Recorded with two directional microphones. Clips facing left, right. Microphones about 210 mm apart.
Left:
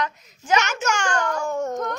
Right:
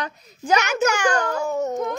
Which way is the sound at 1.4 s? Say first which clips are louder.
Right 2 dB; 5° right (ahead or behind).